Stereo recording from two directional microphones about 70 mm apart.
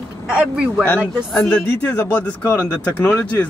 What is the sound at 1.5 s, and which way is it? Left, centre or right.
Speech, left.